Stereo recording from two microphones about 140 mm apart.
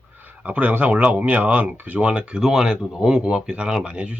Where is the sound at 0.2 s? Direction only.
10° right (ahead or behind).